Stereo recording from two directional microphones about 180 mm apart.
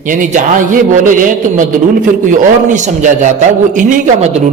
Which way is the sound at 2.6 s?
45° right (ahead or behind).